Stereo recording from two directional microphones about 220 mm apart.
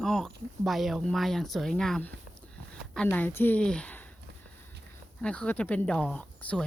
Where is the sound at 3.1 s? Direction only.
10° left (ahead or behind).